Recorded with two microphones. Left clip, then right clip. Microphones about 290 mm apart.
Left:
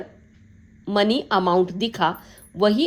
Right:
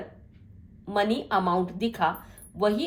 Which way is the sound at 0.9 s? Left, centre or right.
Left.